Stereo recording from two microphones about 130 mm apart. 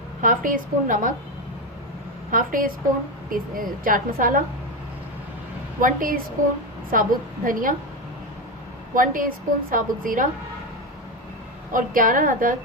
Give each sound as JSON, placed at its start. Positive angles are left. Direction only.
{"t": 0.2, "sound": "a woman's voice", "side_deg": -90}
{"t": 2.3, "sound": "a woman's voice", "side_deg": -90}
{"t": 5.8, "sound": "a woman's voice", "side_deg": -90}
{"t": 9.0, "sound": "a woman's voice", "side_deg": -90}
{"t": 11.7, "sound": "a woman's voice", "side_deg": -90}